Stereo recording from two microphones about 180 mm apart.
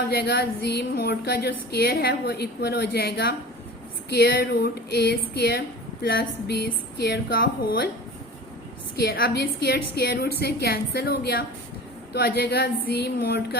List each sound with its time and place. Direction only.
0.1 s speech: 60° left (ahead or behind)
9.0 s speech: 55° left (ahead or behind)